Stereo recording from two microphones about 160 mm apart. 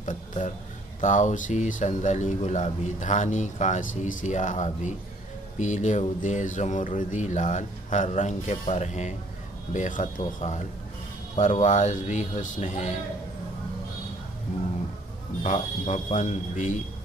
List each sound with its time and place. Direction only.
0.0 s a man's voice: 50° left (ahead or behind)
15.4 s speech: 50° left (ahead or behind)